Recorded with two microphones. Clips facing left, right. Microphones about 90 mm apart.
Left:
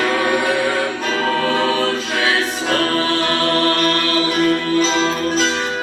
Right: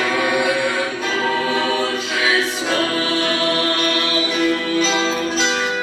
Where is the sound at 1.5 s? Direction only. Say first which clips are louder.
Left 2 dB; centre (ahead or behind).